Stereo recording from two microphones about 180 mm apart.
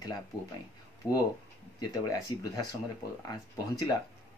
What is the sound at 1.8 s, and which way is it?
Speech, 20° left (ahead or behind).